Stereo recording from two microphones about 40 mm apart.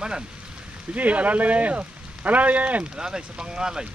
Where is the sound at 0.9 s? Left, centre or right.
Right.